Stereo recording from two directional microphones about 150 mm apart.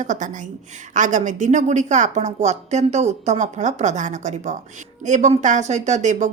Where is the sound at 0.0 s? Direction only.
55° right (ahead or behind).